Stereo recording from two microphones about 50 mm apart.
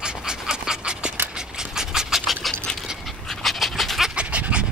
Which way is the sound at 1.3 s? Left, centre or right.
Centre.